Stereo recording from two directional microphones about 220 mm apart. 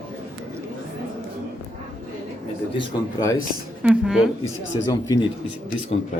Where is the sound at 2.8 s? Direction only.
15° left (ahead or behind).